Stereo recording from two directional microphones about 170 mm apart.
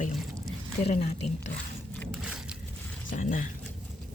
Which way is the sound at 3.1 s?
50° left (ahead or behind).